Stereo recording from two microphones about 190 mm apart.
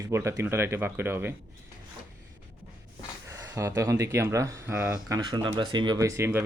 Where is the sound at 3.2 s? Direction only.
15° right (ahead or behind).